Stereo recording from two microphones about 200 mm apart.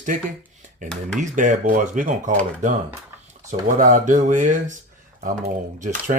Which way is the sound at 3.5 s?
40° right (ahead or behind).